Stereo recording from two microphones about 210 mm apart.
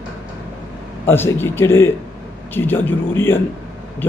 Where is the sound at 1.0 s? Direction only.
10° left (ahead or behind).